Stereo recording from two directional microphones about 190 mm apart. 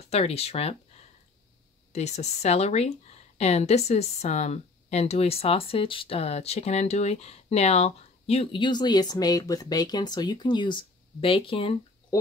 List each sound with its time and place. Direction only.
0.1 s speech: 30° left (ahead or behind)
1.9 s speech: 35° left (ahead or behind)